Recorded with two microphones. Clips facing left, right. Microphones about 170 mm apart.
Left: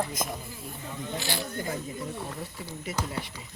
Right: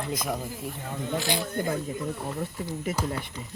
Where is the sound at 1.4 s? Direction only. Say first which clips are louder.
Right 5 dB; 55° right (ahead or behind).